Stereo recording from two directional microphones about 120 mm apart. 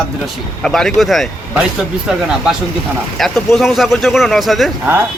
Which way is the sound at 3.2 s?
Centre (ahead or behind).